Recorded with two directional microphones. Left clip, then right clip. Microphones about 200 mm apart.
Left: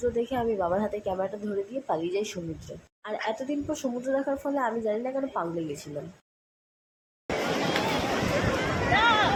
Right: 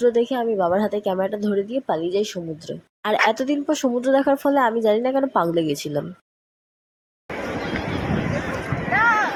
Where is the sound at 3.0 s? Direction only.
50° right (ahead or behind).